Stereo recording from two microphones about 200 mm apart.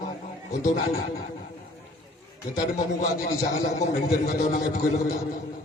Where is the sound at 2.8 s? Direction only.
40° left (ahead or behind).